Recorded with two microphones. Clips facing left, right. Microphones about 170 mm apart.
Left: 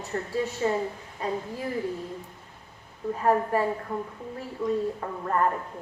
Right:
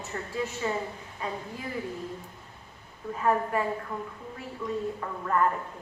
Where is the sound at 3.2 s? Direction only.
35° left (ahead or behind).